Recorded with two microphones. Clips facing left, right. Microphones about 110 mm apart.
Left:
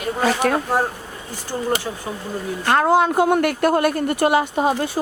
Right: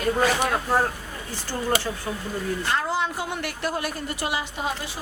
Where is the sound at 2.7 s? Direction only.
55° left (ahead or behind).